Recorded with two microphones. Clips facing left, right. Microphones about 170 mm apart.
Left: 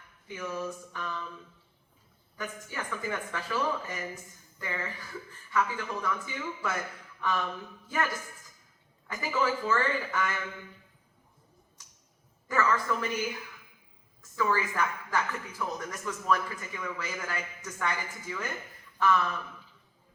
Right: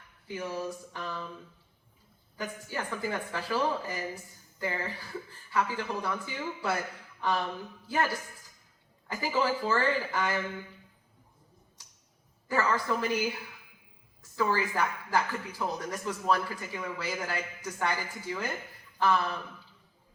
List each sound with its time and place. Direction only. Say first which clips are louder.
0.3 s a man's voice: right 1 dB; 35° right (ahead or behind)
2.4 s a man's voice: right 2 dB; 35° right (ahead or behind)
12.5 s a man's voice: even; 35° right (ahead or behind)